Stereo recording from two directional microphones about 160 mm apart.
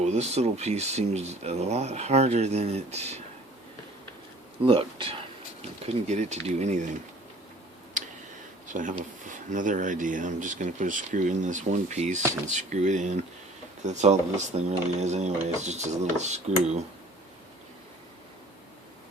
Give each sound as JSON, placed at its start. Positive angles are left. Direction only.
{"t": 0.0, "sound": "speech", "side_deg": -45}
{"t": 4.6, "sound": "speech", "side_deg": -35}
{"t": 8.0, "sound": "tick", "side_deg": -50}
{"t": 8.6, "sound": "speech", "side_deg": -50}